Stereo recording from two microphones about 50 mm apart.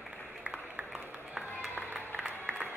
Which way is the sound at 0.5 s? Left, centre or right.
Right.